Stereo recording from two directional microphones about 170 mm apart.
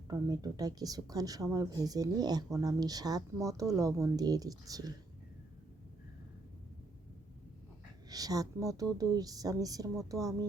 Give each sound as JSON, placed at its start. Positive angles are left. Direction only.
{"t": 0.1, "sound": "speech", "side_deg": -20}
{"t": 8.1, "sound": "speech", "side_deg": -20}